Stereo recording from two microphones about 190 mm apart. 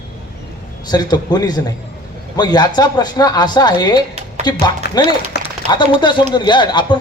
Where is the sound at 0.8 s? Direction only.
20° left (ahead or behind).